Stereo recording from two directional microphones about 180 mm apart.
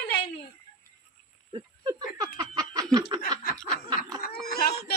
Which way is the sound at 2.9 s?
20° right (ahead or behind).